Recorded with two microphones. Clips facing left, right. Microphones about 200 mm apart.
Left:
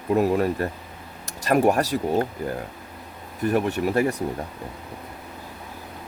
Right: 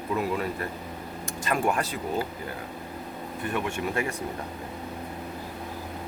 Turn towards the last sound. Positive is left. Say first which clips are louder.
# left 7 dB
turn(degrees=40)  # may be behind; listen again after turning